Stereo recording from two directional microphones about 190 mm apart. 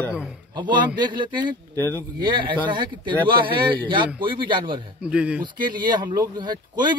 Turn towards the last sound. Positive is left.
turn(degrees=-25)  # may be behind; listen again after turning